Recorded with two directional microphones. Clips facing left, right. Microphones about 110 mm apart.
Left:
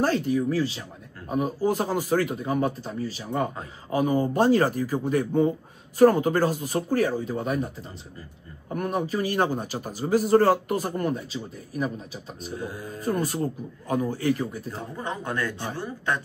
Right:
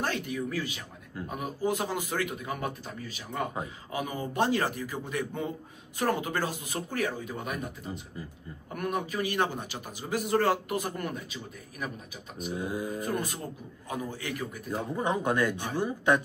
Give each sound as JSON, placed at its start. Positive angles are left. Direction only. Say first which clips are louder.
{"t": 0.3, "sound": "a man's voice", "louder": "left 9 dB", "side_deg": 35}
{"t": 12.5, "sound": "speech", "louder": "right 2 dB", "side_deg": -15}
{"t": 13.0, "sound": "a man's voice", "louder": "left 6 dB", "side_deg": 40}
{"t": 14.7, "sound": "speech", "louder": "right 3 dB", "side_deg": -15}